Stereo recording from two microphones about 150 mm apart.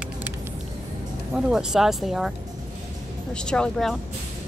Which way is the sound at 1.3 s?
5° right (ahead or behind).